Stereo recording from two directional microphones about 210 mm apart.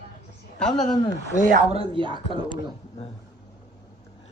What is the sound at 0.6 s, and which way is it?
Speech, 5° left (ahead or behind).